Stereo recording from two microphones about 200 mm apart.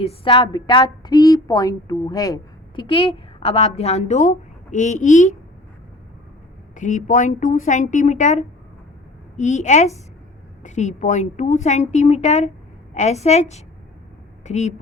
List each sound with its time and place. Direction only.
0.0 s a woman's voice: 30° left (ahead or behind)
6.7 s a woman's voice: 40° left (ahead or behind)